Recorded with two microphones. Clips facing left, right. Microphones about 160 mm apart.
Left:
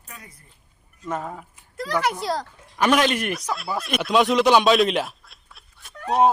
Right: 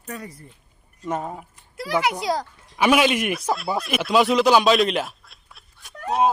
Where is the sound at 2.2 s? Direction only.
Centre (ahead or behind).